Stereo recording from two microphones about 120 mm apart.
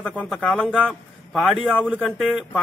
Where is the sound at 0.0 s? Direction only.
10° left (ahead or behind).